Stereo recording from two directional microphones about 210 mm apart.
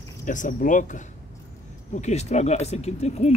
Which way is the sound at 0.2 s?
35° left (ahead or behind).